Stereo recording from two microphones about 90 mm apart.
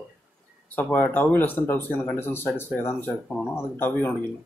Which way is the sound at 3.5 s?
25° left (ahead or behind).